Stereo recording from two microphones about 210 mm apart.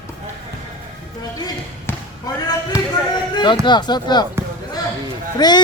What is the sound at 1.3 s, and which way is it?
Basketball bounce, 20° left (ahead or behind).